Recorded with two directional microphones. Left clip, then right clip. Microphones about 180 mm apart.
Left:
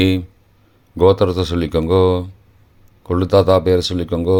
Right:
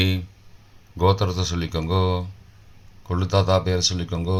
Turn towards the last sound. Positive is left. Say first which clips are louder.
# left 11 dB
turn(degrees=45)  # may be behind; listen again after turning